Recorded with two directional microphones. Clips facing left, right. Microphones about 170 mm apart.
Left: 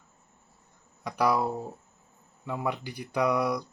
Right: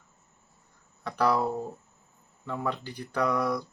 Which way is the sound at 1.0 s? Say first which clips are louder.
Even; 10° left (ahead or behind).